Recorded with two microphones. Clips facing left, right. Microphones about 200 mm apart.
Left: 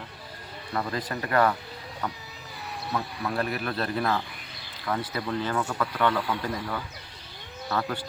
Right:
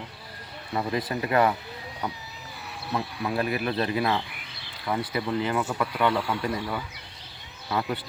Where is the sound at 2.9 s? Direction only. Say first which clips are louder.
Right 2 dB; 15° right (ahead or behind).